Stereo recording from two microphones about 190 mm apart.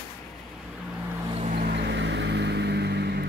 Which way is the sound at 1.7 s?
65° right (ahead or behind).